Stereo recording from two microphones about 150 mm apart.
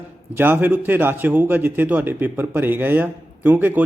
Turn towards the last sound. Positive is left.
turn(degrees=-10)  # may be behind; listen again after turning